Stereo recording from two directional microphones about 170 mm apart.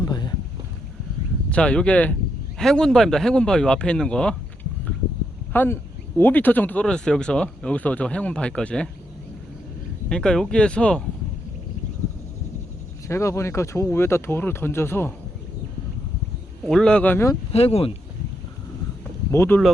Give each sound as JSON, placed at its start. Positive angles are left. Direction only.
{"t": 0.0, "sound": "boat", "side_deg": 25}
{"t": 1.5, "sound": "speech", "side_deg": 5}
{"t": 5.5, "sound": "speech", "side_deg": 15}
{"t": 10.1, "sound": "speech", "side_deg": 5}
{"t": 13.1, "sound": "speech", "side_deg": 15}
{"t": 16.6, "sound": "speech", "side_deg": 5}
{"t": 17.5, "sound": "speech", "side_deg": 35}
{"t": 19.3, "sound": "speech", "side_deg": 10}